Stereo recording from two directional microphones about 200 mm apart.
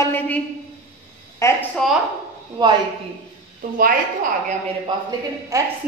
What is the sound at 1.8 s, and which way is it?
Speech, centre (ahead or behind).